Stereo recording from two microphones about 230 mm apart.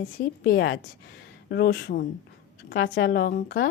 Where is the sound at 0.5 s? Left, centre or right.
Left.